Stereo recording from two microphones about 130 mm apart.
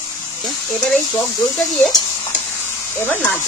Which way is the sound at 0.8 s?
5° left (ahead or behind).